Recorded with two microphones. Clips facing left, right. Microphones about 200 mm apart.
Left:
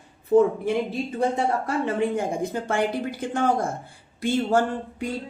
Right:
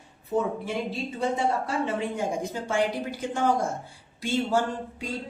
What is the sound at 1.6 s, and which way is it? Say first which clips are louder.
A woman's voice: left 4 dB; 55° left (ahead or behind).